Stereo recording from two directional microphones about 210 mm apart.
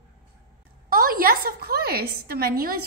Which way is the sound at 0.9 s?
45° right (ahead or behind).